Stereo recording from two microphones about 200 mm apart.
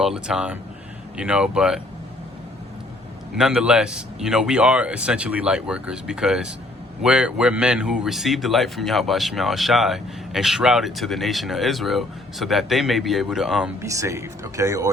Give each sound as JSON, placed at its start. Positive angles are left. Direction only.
{"t": 0.0, "sound": "speech", "side_deg": -5}
{"t": 3.3, "sound": "speech", "side_deg": -5}
{"t": 13.9, "sound": "speech", "side_deg": -15}